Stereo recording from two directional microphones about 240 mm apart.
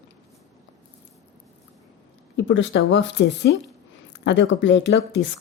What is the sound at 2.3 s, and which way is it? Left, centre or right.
Speech, left.